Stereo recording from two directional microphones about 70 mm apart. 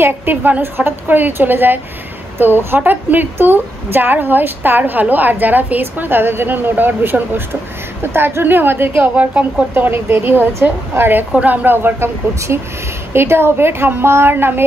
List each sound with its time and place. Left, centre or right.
0.0 s a woman's voice: right
13.1 s a woman's voice: right